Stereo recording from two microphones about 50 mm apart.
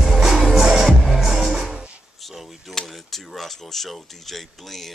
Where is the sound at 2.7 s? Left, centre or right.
Centre.